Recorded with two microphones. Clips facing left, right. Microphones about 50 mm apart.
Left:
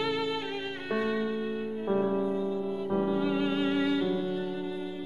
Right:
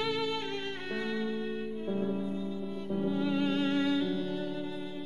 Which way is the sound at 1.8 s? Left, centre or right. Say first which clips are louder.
Left 7 dB; left.